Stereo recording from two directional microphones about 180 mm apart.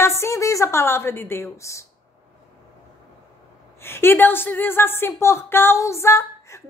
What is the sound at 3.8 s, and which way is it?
A woman's voice, 15° left (ahead or behind).